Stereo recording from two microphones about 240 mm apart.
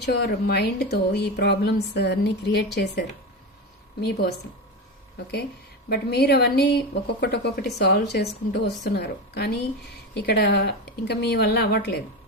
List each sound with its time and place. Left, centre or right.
0.0 s speech: left
5.9 s speech: left